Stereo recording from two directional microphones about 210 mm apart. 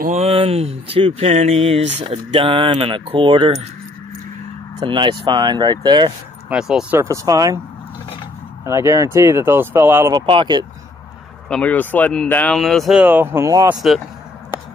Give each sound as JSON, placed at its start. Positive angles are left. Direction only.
{"t": 0.0, "sound": "speech", "side_deg": -35}
{"t": 4.7, "sound": "speech", "side_deg": -20}
{"t": 6.5, "sound": "speech", "side_deg": -5}
{"t": 8.6, "sound": "speech", "side_deg": -15}
{"t": 10.2, "sound": "speech", "side_deg": -25}
{"t": 11.4, "sound": "speech", "side_deg": 5}
{"t": 13.7, "sound": "speech", "side_deg": 0}